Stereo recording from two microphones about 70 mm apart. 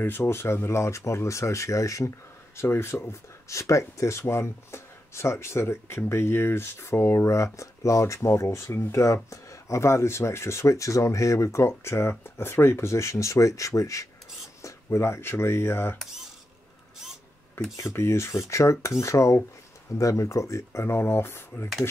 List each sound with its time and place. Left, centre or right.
0.0 s speech: left
17.6 s speech: left